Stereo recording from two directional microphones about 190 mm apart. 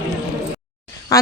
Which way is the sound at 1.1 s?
15° left (ahead or behind).